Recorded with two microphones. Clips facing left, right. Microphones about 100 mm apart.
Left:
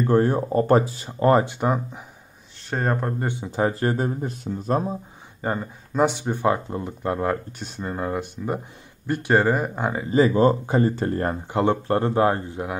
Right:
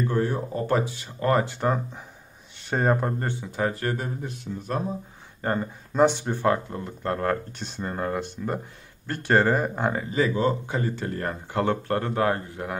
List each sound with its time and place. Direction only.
0.0 s speech: 45° left (ahead or behind)
1.3 s speech: 20° left (ahead or behind)
2.7 s speech: centre (ahead or behind)
3.3 s speech: 20° left (ahead or behind)
5.4 s speech: 5° left (ahead or behind)
6.3 s speech: 15° left (ahead or behind)
10.1 s speech: 35° left (ahead or behind)
11.5 s speech: 20° left (ahead or behind)